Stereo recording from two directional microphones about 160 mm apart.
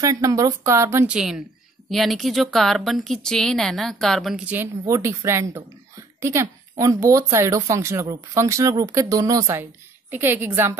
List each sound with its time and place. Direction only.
0.0 s speech: 20° right (ahead or behind)
1.1 s a woman's voice: 5° right (ahead or behind)
4.6 s speech: 20° right (ahead or behind)